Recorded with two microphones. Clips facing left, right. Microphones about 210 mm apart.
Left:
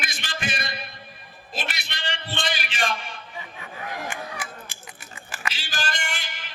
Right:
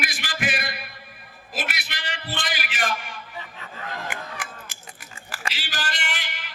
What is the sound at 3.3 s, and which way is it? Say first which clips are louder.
Fowl: left 2 dB; 15° left (ahead or behind).